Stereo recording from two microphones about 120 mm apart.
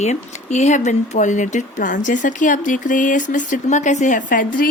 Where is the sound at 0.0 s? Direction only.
75° left (ahead or behind).